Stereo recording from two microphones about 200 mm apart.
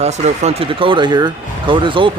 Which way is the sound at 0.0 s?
35° right (ahead or behind).